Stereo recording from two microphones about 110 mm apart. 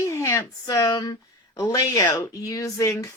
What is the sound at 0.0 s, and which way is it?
Speech, 30° left (ahead or behind).